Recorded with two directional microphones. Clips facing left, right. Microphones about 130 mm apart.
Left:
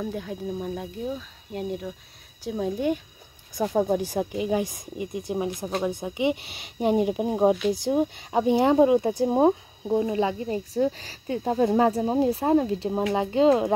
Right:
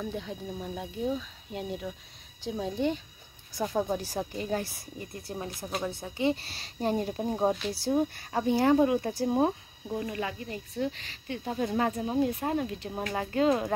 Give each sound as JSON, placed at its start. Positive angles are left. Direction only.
{"t": 0.0, "sound": "speech", "side_deg": 5}